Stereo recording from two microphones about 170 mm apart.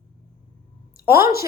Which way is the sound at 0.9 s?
60° left (ahead or behind).